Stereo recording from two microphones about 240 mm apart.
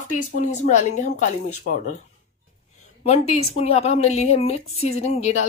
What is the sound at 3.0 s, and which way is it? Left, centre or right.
Speech, left.